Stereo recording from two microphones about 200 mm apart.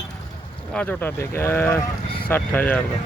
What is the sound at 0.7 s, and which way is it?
Speech, 10° left (ahead or behind).